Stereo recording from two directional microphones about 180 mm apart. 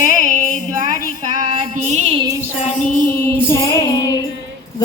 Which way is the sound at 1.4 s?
40° right (ahead or behind).